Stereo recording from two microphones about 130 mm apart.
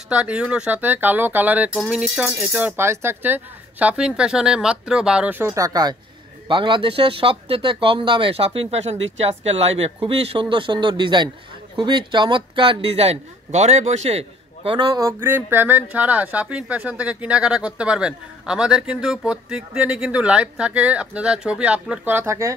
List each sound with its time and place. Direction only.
0.1 s a man's voice: 10° right (ahead or behind); by 14.8 s 50° right (ahead or behind)
14.8 s speech: 30° right (ahead or behind)